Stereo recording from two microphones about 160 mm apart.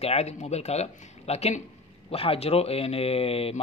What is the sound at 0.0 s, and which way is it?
A man's voice, 40° left (ahead or behind).